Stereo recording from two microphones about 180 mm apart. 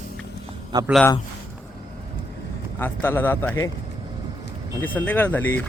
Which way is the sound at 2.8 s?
10° left (ahead or behind).